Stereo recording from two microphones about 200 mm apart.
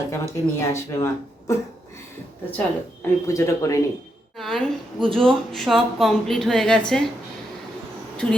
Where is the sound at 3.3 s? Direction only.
15° left (ahead or behind).